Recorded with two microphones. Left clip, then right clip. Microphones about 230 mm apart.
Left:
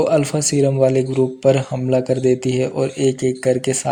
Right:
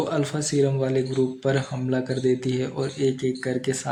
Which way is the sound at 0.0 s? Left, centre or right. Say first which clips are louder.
Left 9 dB; left.